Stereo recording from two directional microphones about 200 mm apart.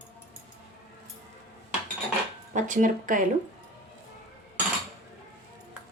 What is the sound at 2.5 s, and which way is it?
Speech, 40° right (ahead or behind).